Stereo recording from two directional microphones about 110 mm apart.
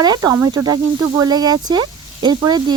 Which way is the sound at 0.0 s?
35° right (ahead or behind).